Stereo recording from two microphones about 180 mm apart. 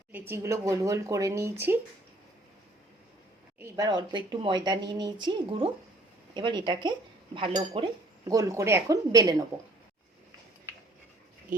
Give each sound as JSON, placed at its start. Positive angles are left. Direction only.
{"t": 0.1, "sound": "speech", "side_deg": -15}
{"t": 3.6, "sound": "speech", "side_deg": -20}